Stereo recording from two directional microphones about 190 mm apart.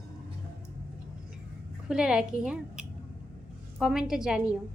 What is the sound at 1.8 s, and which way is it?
A woman's voice, 5° right (ahead or behind).